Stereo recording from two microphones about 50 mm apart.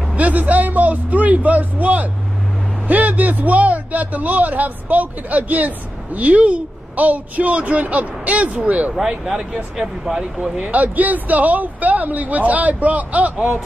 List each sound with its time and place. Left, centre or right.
0.1 s speech: right
9.0 s speech: centre
10.6 s speech: right